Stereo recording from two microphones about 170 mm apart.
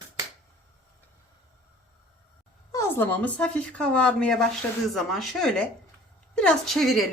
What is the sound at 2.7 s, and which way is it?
A woman's voice, 15° left (ahead or behind).